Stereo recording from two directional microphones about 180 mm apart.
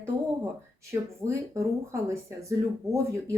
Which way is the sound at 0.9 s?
15° right (ahead or behind).